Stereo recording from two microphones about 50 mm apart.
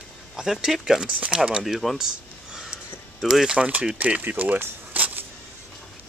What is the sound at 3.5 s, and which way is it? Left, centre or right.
Speech, right.